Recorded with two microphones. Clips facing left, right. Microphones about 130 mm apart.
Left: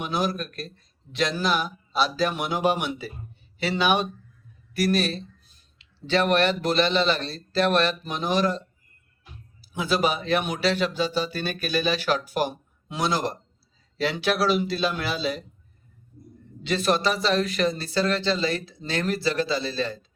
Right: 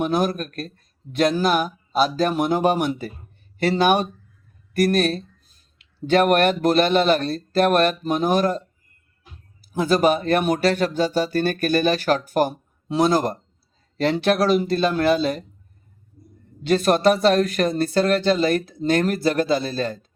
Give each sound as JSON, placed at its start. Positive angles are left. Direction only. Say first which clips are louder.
{"t": 0.0, "sound": "speech", "louder": "right 5 dB", "side_deg": -50}
{"t": 9.7, "sound": "speech", "louder": "right 6 dB", "side_deg": -45}
{"t": 16.6, "sound": "speech", "louder": "right 6 dB", "side_deg": -50}